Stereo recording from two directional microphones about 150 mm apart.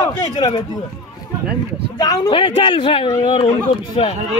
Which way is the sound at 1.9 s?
25° left (ahead or behind).